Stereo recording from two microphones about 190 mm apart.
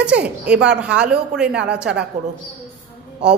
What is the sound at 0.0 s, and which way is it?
A woman's voice, 5° right (ahead or behind).